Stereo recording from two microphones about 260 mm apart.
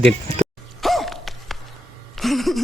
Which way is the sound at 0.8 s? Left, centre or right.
Centre.